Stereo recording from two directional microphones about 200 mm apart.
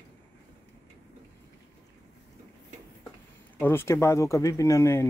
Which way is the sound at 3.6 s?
10° left (ahead or behind).